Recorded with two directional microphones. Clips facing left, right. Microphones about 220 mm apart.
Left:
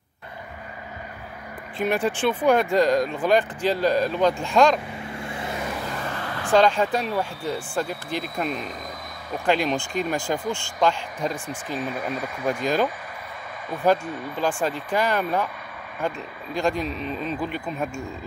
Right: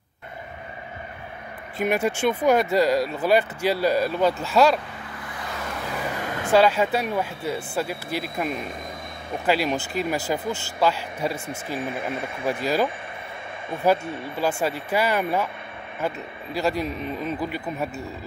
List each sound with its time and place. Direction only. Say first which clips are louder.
1.8 s speech: even; 10° right (ahead or behind)
5.0 s vehicle: left 4 dB; 25° left (ahead or behind)
5.9 s vehicle: right 2 dB; 10° right (ahead or behind)
6.5 s speech: even; 5° right (ahead or behind)
11.9 s speech: even; 25° right (ahead or behind)
14.6 s speech: even; 10° right (ahead or behind)
16.5 s speech: even; 5° right (ahead or behind)